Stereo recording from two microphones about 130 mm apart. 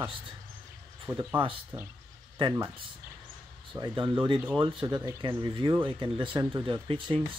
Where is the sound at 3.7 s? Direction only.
30° right (ahead or behind).